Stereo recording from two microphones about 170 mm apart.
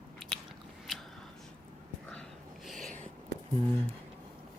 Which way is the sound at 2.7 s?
Centre (ahead or behind).